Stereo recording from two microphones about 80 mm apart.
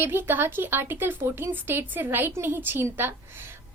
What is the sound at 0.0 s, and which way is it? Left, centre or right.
A woman's voice, right.